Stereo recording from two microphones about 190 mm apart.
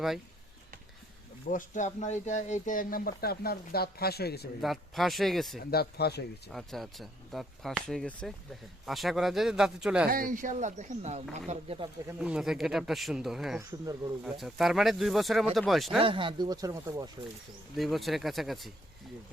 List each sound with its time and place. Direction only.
1.5 s speech: 40° left (ahead or behind)
4.6 s speech: centre (ahead or behind)
5.7 s speech: 55° left (ahead or behind)
6.5 s speech: centre (ahead or behind)
10.1 s speech: 45° right (ahead or behind)
12.0 s speech: 5° right (ahead or behind)
16.0 s speech: 25° right (ahead or behind)
17.7 s speech: centre (ahead or behind)